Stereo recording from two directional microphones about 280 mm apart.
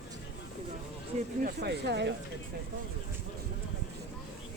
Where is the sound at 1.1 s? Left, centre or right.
Right.